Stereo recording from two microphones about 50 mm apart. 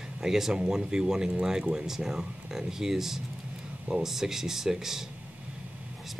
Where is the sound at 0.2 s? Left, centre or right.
Centre.